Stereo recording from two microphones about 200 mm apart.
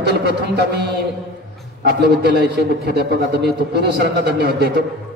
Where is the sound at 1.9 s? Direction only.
55° right (ahead or behind).